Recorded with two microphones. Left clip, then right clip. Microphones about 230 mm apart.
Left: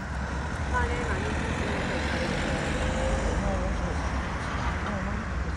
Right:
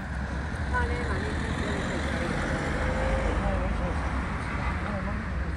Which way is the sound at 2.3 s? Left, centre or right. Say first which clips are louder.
Left 1 dB; left.